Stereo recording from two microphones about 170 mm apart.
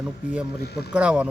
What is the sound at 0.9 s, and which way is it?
Speech, 5° right (ahead or behind).